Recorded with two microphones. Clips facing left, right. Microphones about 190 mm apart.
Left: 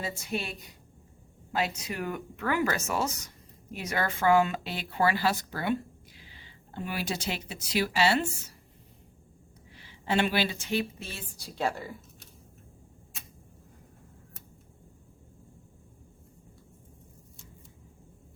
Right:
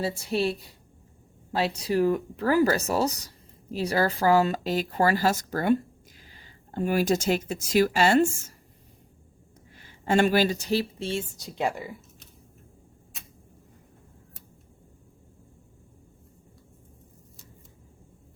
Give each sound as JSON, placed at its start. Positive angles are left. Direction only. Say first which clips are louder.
{"t": 0.0, "sound": "speech", "louder": "right 8 dB", "side_deg": -35}
{"t": 1.5, "sound": "speech", "louder": "right 7 dB", "side_deg": -35}
{"t": 9.7, "sound": "speech", "louder": "right 5 dB", "side_deg": -45}